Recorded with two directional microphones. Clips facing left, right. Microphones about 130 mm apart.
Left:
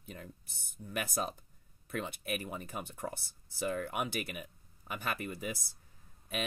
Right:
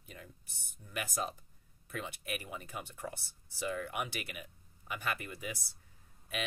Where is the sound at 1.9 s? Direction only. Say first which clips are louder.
Left 4 dB; 45° left (ahead or behind).